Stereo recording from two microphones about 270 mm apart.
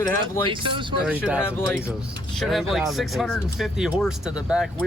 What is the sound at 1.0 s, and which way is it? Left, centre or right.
Speech, centre.